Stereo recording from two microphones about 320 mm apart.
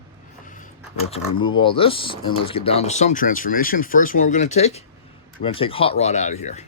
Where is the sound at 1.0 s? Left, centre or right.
Centre.